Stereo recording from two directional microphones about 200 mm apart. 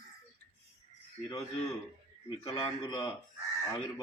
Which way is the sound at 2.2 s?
25° left (ahead or behind).